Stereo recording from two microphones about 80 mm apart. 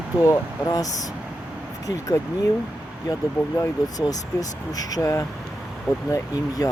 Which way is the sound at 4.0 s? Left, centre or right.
Left.